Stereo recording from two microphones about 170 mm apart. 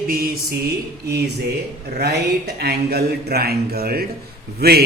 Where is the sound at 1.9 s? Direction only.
75° right (ahead or behind).